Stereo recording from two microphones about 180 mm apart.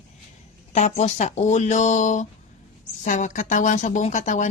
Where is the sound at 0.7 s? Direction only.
40° left (ahead or behind).